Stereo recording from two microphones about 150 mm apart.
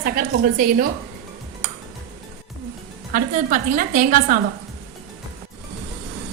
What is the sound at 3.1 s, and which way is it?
A woman's voice, 60° right (ahead or behind).